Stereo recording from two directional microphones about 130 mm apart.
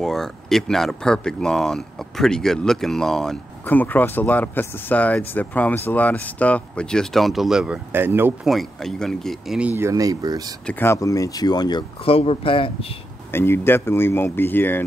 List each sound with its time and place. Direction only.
0.0 s speech: centre (ahead or behind)
3.6 s speech: 15° left (ahead or behind); by 8.3 s 15° right (ahead or behind)
8.5 s speech: centre (ahead or behind)
9.6 s speech: 15° right (ahead or behind)
10.7 s speech: 20° left (ahead or behind)
12.0 s speech: 45° left (ahead or behind)
13.3 s speech: 15° left (ahead or behind)